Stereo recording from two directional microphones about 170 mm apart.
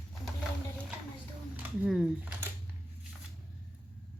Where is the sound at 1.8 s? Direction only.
5° right (ahead or behind).